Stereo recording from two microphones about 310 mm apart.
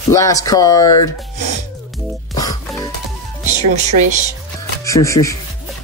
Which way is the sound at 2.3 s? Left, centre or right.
Centre.